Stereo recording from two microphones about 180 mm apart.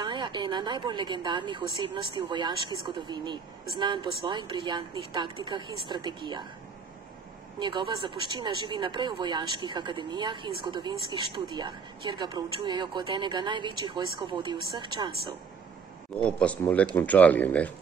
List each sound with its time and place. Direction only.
0.0 s speech: 25° right (ahead or behind)
7.5 s speech: 25° right (ahead or behind)
16.2 s speech: 5° left (ahead or behind)